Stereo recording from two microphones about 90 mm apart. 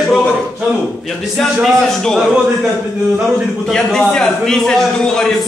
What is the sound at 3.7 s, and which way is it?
A man's voice, 5° left (ahead or behind).